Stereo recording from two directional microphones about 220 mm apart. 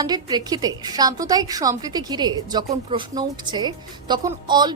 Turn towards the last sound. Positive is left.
turn(degrees=-20)  # may be behind; listen again after turning